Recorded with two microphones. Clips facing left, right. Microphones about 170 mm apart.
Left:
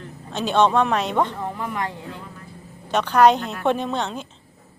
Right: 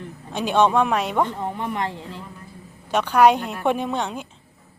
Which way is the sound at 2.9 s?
10° right (ahead or behind).